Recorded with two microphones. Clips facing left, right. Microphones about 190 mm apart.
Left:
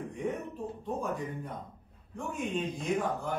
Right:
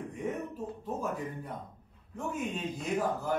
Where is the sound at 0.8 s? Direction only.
Centre (ahead or behind).